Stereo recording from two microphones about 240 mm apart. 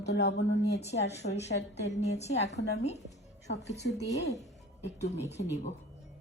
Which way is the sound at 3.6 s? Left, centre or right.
Left.